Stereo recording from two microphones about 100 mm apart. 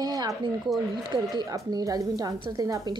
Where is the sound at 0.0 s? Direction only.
40° right (ahead or behind).